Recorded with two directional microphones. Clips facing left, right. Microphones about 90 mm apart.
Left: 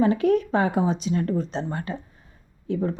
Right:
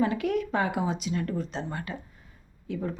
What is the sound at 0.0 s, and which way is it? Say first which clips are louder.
Speech: left 6 dB; 30° left (ahead or behind).